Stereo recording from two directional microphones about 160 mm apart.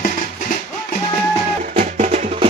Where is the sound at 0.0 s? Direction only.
55° left (ahead or behind).